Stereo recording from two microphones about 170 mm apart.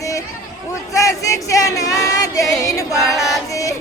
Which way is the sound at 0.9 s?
20° left (ahead or behind).